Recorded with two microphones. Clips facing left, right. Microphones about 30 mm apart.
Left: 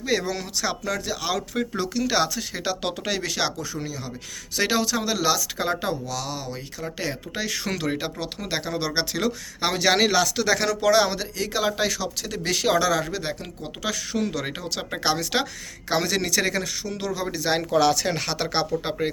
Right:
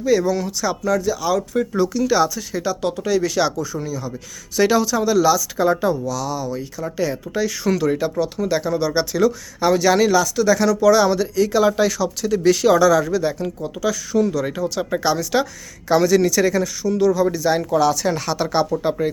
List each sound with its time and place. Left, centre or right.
0.0 s speech: left
1.7 s speech: left
2.8 s speech: left
3.2 s speech: left
18.1 s speech: left